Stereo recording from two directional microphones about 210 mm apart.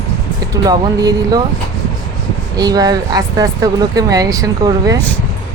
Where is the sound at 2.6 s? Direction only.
20° right (ahead or behind).